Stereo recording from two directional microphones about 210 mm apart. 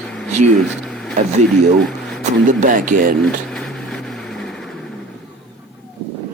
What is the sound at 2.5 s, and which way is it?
Speech, 40° right (ahead or behind).